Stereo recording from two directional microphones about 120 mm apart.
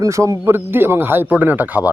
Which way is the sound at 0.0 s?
25° right (ahead or behind).